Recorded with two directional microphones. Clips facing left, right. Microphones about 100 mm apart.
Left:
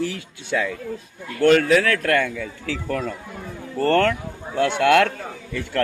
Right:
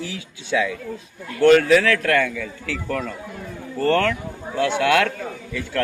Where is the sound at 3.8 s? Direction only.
60° left (ahead or behind).